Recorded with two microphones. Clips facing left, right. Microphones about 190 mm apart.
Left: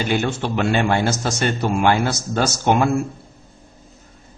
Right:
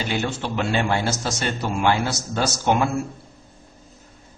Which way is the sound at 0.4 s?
55° left (ahead or behind).